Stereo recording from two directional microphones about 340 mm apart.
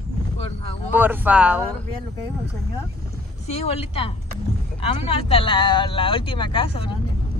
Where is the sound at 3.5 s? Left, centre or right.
Centre.